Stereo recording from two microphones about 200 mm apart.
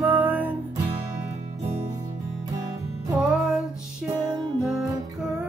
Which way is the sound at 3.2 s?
5° right (ahead or behind).